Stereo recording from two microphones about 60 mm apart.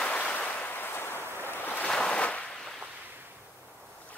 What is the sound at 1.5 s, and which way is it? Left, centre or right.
Ocean, left.